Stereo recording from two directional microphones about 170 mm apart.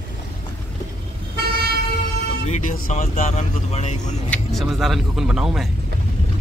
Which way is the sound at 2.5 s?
45° left (ahead or behind).